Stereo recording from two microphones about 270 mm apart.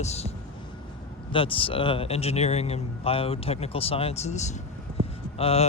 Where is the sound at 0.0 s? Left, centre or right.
Left.